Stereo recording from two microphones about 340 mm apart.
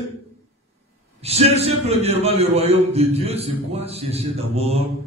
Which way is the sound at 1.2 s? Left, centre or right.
Centre.